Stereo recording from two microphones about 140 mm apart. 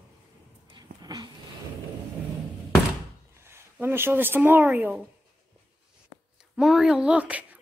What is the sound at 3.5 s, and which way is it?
Speech, 15° right (ahead or behind).